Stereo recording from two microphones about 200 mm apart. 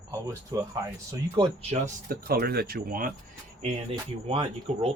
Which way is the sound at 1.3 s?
30° right (ahead or behind).